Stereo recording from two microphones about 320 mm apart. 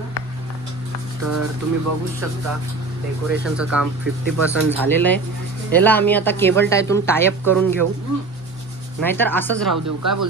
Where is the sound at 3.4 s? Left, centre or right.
Centre.